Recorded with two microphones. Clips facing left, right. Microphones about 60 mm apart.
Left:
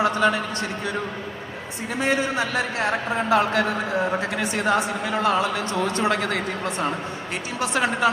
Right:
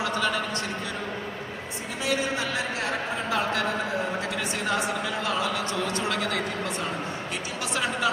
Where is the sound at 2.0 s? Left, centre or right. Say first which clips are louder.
Left 4 dB; left.